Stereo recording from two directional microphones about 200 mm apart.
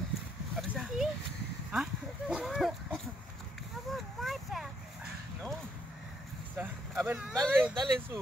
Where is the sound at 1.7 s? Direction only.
5° right (ahead or behind).